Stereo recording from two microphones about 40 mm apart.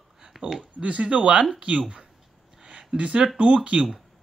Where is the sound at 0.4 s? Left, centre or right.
Centre.